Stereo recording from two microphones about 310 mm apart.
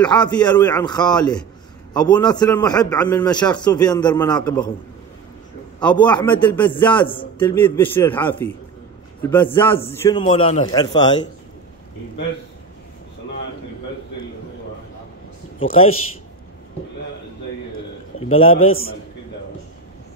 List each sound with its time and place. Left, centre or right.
0.0 s a man's voice: centre
5.9 s a man's voice: centre
18.3 s a man's voice: centre
18.6 s a man's voice: left